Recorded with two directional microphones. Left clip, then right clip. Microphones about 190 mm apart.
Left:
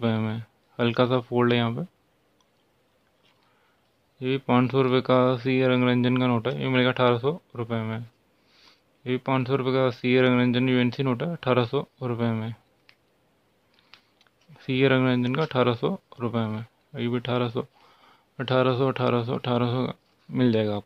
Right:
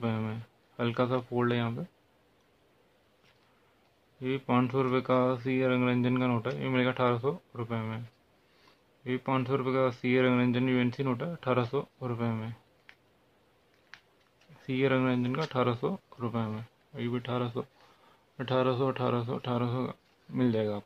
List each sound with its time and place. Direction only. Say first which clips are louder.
0.0 s speech: left 7 dB; 40° left (ahead or behind)
4.2 s speech: left 6 dB; 40° left (ahead or behind)
14.6 s speech: left 6 dB; 40° left (ahead or behind)